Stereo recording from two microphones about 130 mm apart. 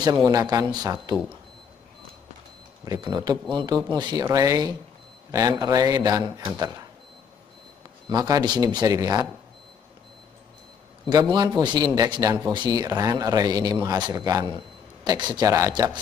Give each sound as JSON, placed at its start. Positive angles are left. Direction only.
{"t": 0.0, "sound": "speech", "side_deg": -30}
{"t": 2.8, "sound": "speech", "side_deg": -30}
{"t": 8.1, "sound": "speech", "side_deg": -30}
{"t": 11.3, "sound": "speech", "side_deg": -30}